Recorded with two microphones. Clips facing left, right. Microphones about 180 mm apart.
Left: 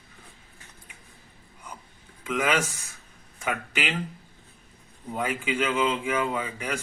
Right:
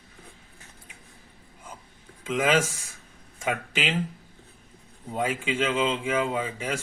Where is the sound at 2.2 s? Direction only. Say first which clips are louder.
Right 2 dB; 25° right (ahead or behind).